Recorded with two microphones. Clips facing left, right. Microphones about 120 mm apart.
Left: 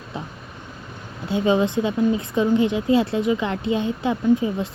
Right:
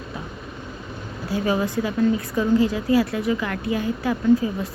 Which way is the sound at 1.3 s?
20° left (ahead or behind).